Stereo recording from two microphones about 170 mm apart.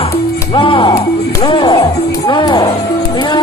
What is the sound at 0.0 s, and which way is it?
Music, 35° left (ahead or behind).